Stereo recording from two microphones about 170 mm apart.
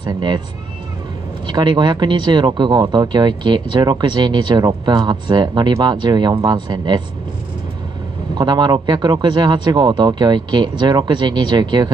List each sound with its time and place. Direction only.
0.0 s speech: 25° right (ahead or behind)
1.5 s speech: 25° right (ahead or behind)
8.4 s speech: 25° right (ahead or behind)